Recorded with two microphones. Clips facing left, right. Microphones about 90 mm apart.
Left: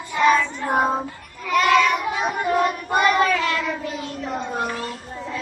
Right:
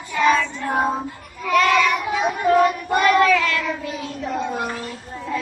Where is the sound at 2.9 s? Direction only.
20° left (ahead or behind).